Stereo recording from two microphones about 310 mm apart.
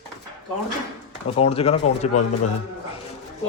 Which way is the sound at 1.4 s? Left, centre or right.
Centre.